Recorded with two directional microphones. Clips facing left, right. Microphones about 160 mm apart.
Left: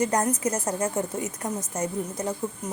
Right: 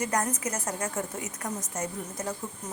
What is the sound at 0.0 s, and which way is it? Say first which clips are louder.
A woman's voice: left 5 dB; 25° left (ahead or behind).